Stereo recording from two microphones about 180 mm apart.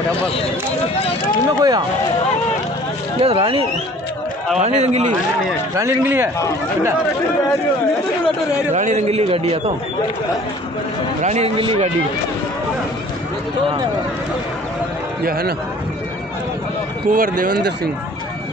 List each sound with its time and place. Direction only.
1.5 s speech: 20° right (ahead or behind)
3.2 s a man's voice: 30° right (ahead or behind)
5.8 s speech: 15° right (ahead or behind)
8.7 s a man's voice: 40° right (ahead or behind)
11.2 s a man's voice: 35° right (ahead or behind)
15.2 s a man's voice: 55° right (ahead or behind)
17.1 s speech: 50° right (ahead or behind)